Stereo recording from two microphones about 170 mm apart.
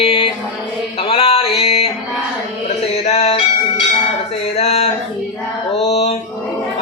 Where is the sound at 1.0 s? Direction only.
35° left (ahead or behind).